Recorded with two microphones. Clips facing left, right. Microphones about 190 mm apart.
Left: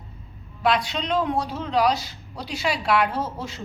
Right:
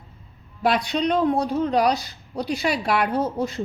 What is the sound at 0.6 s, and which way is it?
Speech, 50° right (ahead or behind).